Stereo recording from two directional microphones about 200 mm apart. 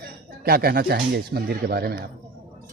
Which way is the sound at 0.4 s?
50° right (ahead or behind).